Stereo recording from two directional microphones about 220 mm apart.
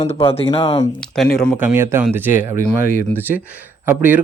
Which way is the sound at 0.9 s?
Centre (ahead or behind).